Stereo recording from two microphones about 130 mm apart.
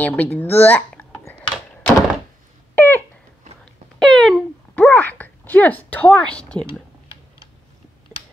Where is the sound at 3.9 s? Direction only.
Centre (ahead or behind).